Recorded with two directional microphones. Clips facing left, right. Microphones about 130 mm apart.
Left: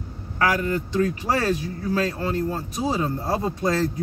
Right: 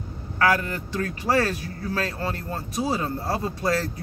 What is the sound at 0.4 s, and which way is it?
Speech, 20° left (ahead or behind).